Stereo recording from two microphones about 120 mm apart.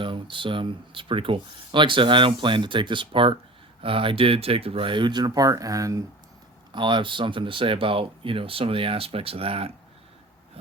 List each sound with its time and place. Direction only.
0.0 s speech: 45° right (ahead or behind); by 6.1 s 30° right (ahead or behind)
6.7 s speech: 40° right (ahead or behind)